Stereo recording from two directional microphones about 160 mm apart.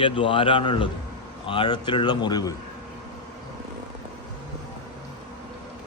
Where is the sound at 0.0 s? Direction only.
30° left (ahead or behind).